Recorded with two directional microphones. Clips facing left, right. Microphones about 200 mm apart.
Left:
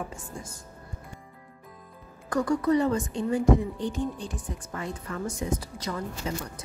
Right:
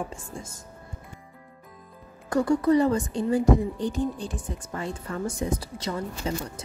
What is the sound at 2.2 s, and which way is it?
A woman's voice, 30° right (ahead or behind).